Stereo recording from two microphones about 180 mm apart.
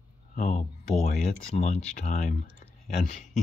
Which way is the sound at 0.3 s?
45° left (ahead or behind).